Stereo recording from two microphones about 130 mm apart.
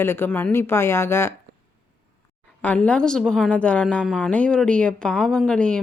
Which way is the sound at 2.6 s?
10° left (ahead or behind).